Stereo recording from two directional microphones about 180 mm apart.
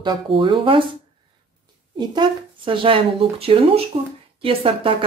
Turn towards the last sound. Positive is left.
turn(degrees=-30)  # may be behind; listen again after turning